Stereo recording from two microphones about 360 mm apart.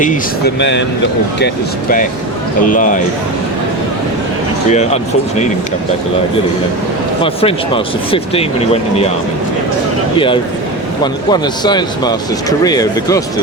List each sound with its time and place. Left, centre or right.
0.0 s speech: left
2.6 s speech: left
4.7 s speech: centre
7.2 s speech: centre
11.0 s speech: centre